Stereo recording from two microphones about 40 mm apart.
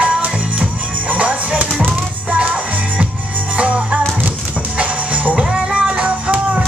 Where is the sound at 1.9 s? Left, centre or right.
Right.